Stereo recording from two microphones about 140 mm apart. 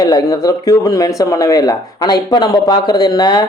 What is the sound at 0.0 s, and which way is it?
Speech, 25° left (ahead or behind).